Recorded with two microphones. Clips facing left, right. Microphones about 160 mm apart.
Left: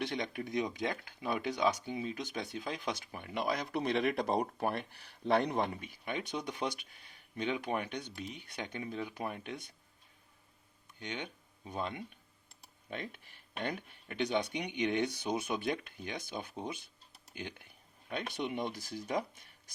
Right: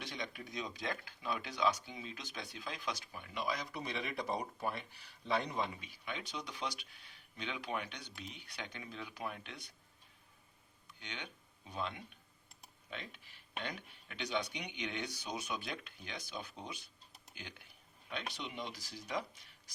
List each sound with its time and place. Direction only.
0.0 s speech: 55° left (ahead or behind)
11.0 s speech: 50° left (ahead or behind)